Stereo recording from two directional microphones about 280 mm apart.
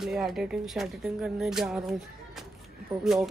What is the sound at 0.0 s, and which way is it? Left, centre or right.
Speech, centre.